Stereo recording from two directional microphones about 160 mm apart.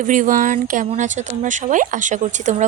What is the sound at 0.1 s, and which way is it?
A woman's voice, 55° right (ahead or behind).